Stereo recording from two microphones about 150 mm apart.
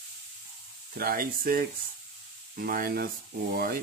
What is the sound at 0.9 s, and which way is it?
Speech, 80° right.